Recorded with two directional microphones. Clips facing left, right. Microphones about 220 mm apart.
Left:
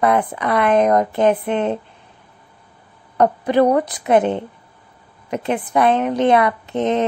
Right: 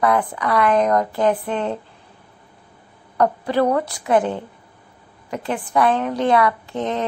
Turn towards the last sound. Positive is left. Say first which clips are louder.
# left 5 dB
turn(degrees=20)  # may be behind; listen again after turning